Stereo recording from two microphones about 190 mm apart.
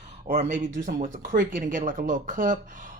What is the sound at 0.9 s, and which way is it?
Speech, 45° right (ahead or behind).